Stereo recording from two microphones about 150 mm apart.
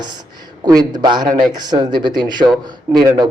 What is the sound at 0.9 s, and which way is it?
A man's voice, 30° right (ahead or behind).